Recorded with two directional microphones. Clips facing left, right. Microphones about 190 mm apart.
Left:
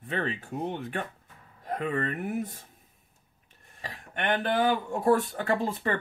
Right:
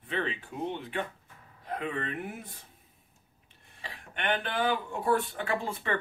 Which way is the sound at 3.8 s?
45° left (ahead or behind).